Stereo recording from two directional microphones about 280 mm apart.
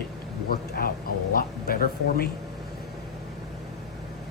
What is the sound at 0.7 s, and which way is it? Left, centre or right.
Speech, left.